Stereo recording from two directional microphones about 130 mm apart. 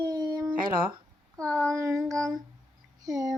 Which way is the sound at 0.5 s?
90° right.